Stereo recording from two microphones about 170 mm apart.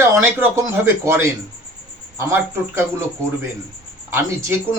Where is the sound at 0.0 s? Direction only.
15° right (ahead or behind).